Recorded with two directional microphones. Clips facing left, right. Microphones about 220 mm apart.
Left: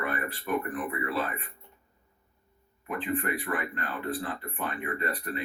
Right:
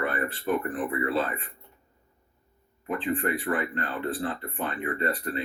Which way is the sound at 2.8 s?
30° right (ahead or behind).